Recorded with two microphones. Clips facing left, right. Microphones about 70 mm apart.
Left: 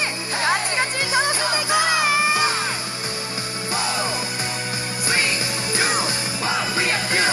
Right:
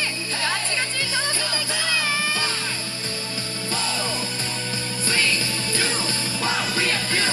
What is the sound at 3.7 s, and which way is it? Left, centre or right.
Music, centre.